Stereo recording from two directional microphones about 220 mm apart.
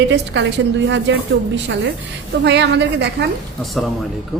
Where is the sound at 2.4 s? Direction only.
50° right (ahead or behind).